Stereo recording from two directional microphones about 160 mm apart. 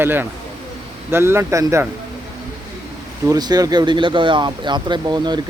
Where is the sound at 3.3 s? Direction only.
25° right (ahead or behind).